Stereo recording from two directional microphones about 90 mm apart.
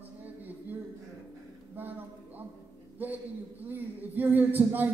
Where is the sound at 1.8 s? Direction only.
20° right (ahead or behind).